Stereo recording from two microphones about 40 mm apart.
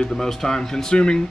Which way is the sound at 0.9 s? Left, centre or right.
Left.